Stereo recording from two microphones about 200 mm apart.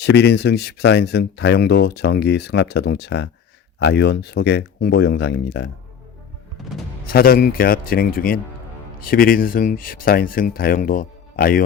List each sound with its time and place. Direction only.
0.0 s speech: 55° left (ahead or behind)
7.1 s speech: 50° left (ahead or behind)